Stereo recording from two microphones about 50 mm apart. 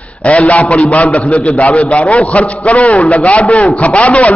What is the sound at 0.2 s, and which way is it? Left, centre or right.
A man's voice, left.